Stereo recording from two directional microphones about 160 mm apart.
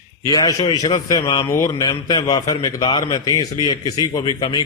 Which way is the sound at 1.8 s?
25° left (ahead or behind).